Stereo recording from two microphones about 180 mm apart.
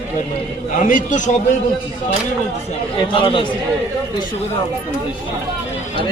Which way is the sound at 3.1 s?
30° left (ahead or behind).